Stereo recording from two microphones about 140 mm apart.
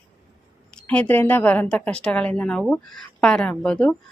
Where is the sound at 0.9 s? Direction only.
10° left (ahead or behind).